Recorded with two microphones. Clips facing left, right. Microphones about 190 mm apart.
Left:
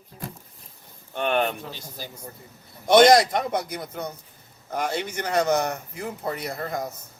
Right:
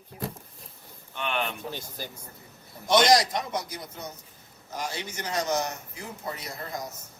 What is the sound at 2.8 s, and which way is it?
A man's voice, 55° left (ahead or behind).